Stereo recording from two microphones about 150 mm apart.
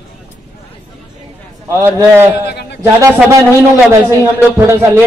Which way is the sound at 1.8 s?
15° right (ahead or behind).